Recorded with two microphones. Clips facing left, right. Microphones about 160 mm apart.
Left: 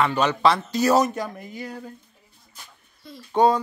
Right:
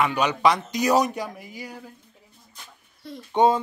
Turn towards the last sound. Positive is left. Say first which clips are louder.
# left 1 dB
turn(degrees=-20)  # may be behind; listen again after turning